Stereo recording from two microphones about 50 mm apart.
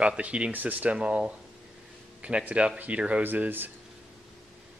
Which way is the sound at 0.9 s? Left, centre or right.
Right.